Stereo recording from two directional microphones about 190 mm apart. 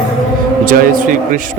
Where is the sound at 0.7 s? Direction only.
45° right (ahead or behind).